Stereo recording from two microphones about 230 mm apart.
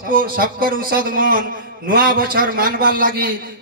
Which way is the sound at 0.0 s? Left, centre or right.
Right.